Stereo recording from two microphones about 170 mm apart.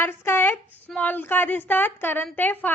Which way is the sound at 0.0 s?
15° left (ahead or behind).